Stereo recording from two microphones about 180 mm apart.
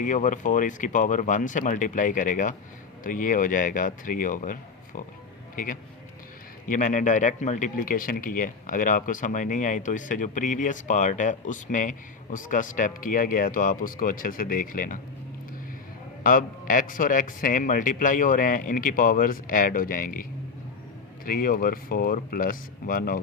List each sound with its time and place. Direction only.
0.0 s speech: 45° left (ahead or behind)
5.6 s speech: 45° left (ahead or behind)
16.2 s speech: 50° left (ahead or behind)
21.2 s speech: 50° left (ahead or behind)